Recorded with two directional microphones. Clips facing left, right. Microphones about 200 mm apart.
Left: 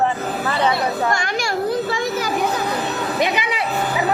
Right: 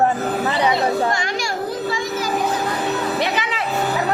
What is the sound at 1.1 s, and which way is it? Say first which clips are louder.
Children playing: left 1 dB; 55° left (ahead or behind).